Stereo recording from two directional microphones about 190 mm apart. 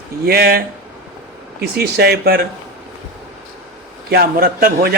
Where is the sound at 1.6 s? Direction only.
55° right (ahead or behind).